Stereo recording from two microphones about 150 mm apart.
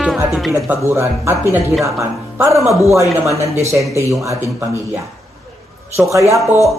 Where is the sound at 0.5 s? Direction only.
15° right (ahead or behind).